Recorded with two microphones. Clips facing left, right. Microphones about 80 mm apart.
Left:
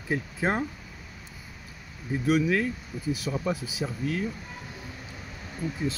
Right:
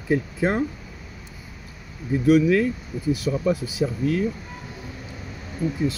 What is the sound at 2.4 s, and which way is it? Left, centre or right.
Speech, left.